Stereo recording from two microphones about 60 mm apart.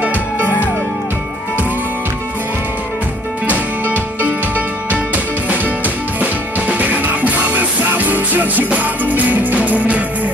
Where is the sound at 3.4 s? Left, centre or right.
Right.